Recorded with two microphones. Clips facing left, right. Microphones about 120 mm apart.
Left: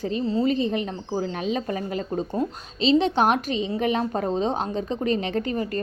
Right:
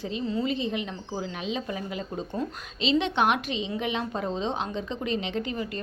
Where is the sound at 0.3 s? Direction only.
35° left (ahead or behind).